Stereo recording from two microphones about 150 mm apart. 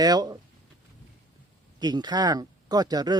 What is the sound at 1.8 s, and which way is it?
Speech, 25° right (ahead or behind).